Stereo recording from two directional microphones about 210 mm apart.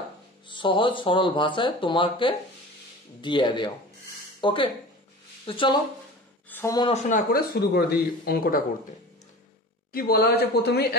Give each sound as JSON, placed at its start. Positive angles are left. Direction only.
{"t": 0.5, "sound": "speech", "side_deg": 25}
{"t": 6.9, "sound": "speech", "side_deg": 40}
{"t": 9.9, "sound": "speech", "side_deg": 45}